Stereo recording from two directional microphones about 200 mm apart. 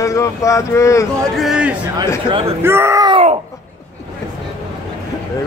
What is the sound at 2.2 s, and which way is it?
Speech, 25° right (ahead or behind).